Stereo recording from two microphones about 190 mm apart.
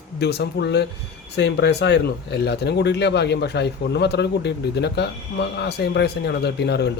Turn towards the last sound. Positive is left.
turn(degrees=60)  # may be behind; listen again after turning